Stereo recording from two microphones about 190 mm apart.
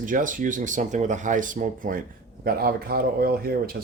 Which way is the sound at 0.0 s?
45° right (ahead or behind).